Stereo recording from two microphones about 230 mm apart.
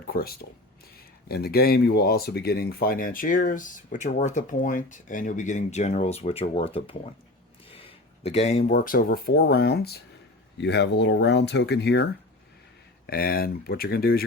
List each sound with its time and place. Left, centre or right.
0.1 s speech: left
13.1 s speech: left